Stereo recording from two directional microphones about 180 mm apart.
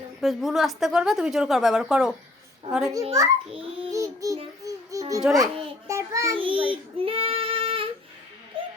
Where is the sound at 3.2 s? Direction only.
15° right (ahead or behind).